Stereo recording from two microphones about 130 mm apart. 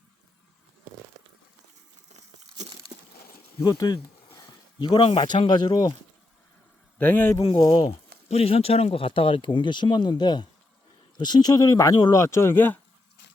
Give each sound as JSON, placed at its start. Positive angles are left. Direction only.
{"t": 2.1, "sound": "tearing", "side_deg": -60}
{"t": 3.6, "sound": "speech", "side_deg": 25}
{"t": 7.0, "sound": "speech", "side_deg": 15}
{"t": 7.5, "sound": "speech", "side_deg": 30}
{"t": 8.3, "sound": "speech", "side_deg": 50}